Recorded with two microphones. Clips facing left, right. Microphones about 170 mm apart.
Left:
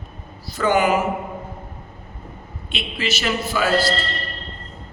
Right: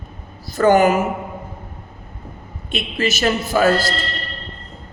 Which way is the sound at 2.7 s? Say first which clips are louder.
Right 5 dB; 45° right (ahead or behind).